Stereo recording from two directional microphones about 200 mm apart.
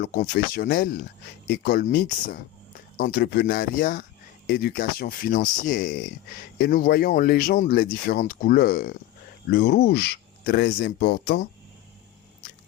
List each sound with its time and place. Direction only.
0.0 s speech: 50° left (ahead or behind)